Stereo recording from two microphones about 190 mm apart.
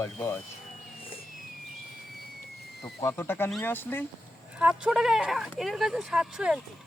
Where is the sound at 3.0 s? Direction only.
10° left (ahead or behind).